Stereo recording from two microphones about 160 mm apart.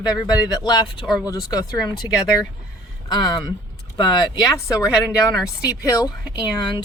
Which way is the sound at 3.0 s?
25° left (ahead or behind).